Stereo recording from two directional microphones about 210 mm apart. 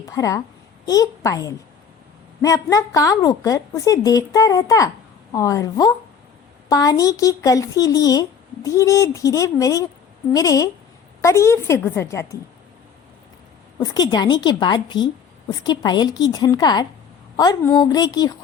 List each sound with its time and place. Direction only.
0.0 s speech: 15° left (ahead or behind)
13.7 s a woman's voice: 20° left (ahead or behind)